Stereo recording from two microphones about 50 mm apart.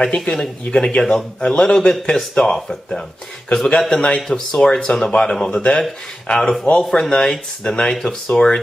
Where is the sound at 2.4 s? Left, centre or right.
Centre.